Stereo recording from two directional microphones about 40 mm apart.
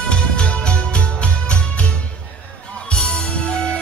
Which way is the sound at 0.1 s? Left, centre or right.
Left.